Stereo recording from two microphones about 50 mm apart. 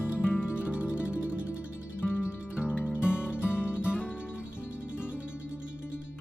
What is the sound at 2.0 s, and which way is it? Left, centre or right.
Music, left.